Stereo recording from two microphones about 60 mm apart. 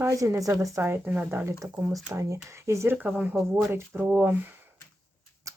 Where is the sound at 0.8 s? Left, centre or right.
Right.